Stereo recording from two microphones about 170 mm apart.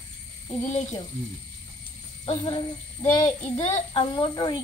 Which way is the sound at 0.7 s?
40° left (ahead or behind).